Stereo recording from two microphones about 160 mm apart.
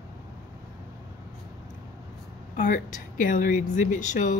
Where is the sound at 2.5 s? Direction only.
50° left (ahead or behind).